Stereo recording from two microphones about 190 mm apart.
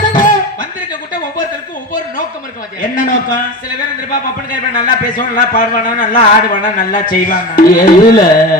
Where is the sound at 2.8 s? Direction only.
45° left (ahead or behind).